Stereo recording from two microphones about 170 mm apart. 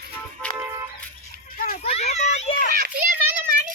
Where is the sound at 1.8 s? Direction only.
40° left (ahead or behind).